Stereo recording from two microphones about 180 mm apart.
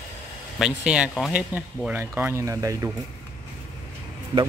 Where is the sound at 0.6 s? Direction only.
5° right (ahead or behind).